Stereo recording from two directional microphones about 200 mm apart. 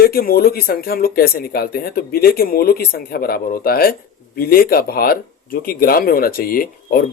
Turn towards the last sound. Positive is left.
turn(degrees=45)  # may be behind; listen again after turning